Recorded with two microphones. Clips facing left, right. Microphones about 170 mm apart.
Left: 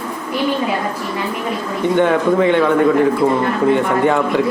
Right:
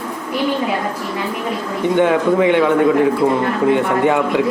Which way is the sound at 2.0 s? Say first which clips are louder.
Even; 15° right (ahead or behind).